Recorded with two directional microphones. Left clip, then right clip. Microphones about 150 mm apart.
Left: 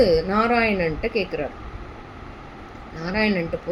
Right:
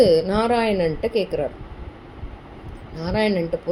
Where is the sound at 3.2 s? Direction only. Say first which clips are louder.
Right 1 dB; 50° right (ahead or behind).